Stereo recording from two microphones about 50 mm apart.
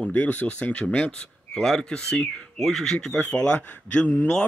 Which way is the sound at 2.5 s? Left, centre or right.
Centre.